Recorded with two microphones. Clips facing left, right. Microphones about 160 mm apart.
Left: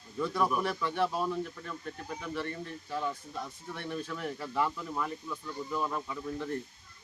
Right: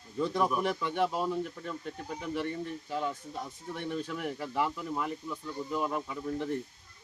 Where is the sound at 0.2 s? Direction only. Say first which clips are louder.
Right 1 dB; 20° right (ahead or behind).